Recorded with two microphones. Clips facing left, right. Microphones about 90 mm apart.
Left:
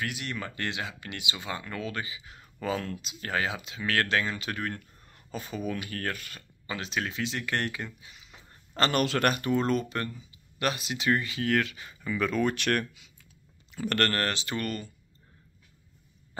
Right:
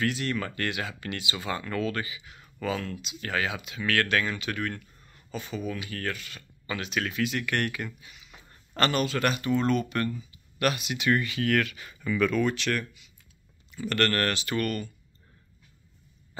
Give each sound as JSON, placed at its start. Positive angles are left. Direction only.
{"t": 0.0, "sound": "speech", "side_deg": 15}
{"t": 2.1, "sound": "speech", "side_deg": 35}
{"t": 5.1, "sound": "a sound", "side_deg": 40}
{"t": 5.7, "sound": "speech", "side_deg": 45}
{"t": 6.7, "sound": "speech", "side_deg": 25}
{"t": 9.2, "sound": "speech", "side_deg": 45}
{"t": 12.4, "sound": "speech", "side_deg": 50}
{"t": 13.8, "sound": "speech", "side_deg": 80}
{"t": 14.1, "sound": "speech", "side_deg": 25}